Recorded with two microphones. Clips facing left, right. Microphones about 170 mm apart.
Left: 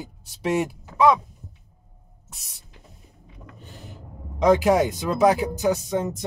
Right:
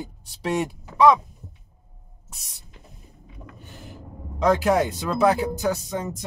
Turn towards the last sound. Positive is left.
turn(degrees=20)  # may be behind; listen again after turning